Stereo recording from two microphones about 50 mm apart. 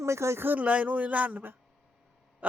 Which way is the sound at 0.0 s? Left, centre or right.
Right.